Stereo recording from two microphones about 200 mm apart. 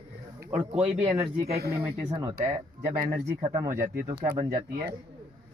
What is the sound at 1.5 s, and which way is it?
Speech, 50° right (ahead or behind).